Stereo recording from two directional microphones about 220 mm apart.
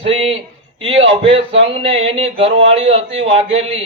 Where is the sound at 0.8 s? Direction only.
25° right (ahead or behind).